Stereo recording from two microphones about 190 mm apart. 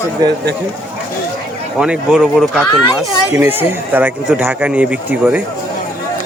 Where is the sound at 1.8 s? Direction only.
5° right (ahead or behind).